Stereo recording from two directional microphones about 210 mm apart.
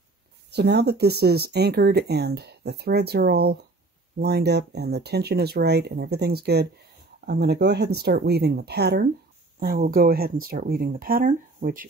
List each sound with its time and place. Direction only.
0.5 s speech: 50° right (ahead or behind)